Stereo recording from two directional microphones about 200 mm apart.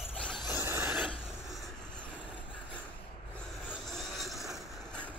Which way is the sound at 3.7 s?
Centre (ahead or behind).